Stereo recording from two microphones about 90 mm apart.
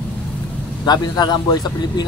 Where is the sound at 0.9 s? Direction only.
50° left (ahead or behind).